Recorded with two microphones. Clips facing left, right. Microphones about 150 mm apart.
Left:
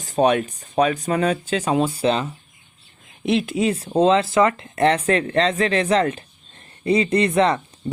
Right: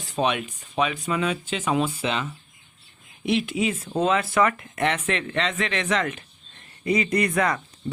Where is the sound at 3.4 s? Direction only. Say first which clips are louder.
Left 4 dB; 40° left (ahead or behind).